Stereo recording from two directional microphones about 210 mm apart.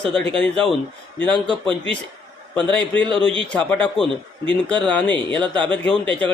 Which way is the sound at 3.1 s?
25° right (ahead or behind).